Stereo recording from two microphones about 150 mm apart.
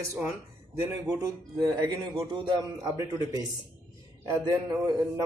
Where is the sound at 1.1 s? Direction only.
25° right (ahead or behind).